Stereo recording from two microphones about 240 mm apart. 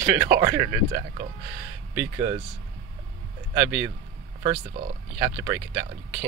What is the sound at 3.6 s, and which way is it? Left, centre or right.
Speech, centre.